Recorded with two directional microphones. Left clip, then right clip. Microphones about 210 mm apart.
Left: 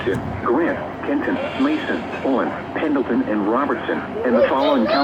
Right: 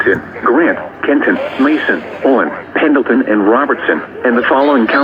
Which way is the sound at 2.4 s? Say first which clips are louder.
Right 8 dB; 30° right (ahead or behind).